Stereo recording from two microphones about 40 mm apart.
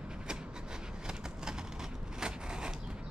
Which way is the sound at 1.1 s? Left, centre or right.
Centre.